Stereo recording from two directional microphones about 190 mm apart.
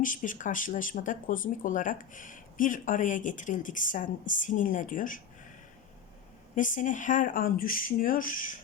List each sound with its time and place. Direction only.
0.0 s speech: 45° left (ahead or behind)
6.6 s speech: 45° left (ahead or behind)